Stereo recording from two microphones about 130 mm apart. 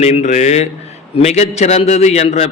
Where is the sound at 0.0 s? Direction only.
60° left (ahead or behind).